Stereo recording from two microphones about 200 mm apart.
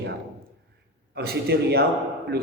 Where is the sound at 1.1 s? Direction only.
50° right (ahead or behind).